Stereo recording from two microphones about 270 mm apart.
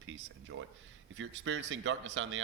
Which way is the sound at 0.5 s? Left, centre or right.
Right.